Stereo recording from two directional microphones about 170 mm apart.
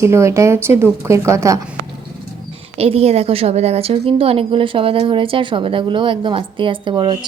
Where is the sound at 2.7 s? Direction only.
35° right (ahead or behind).